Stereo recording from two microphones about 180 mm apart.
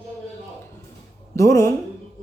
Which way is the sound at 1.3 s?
15° left (ahead or behind).